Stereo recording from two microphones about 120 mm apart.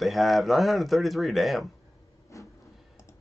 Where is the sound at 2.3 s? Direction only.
25° left (ahead or behind).